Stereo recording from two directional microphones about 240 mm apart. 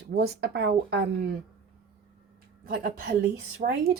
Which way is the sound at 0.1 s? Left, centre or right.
Right.